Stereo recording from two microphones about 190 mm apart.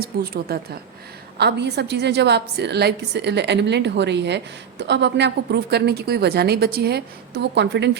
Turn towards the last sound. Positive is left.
turn(degrees=-65)  # may be behind; listen again after turning